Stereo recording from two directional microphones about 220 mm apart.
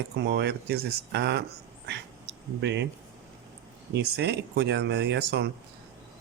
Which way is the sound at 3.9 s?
50° right (ahead or behind).